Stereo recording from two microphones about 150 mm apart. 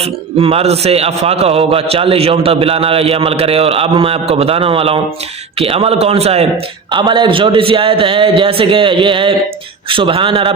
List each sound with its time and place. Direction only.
0.0 s a man's voice: 40° right (ahead or behind)
6.9 s a man's voice: 30° right (ahead or behind)